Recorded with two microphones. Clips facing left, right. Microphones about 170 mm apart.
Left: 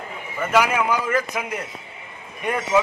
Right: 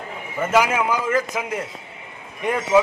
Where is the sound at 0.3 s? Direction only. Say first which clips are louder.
Right 1 dB; 25° right (ahead or behind).